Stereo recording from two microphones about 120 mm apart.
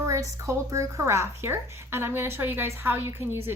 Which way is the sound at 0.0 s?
25° right (ahead or behind).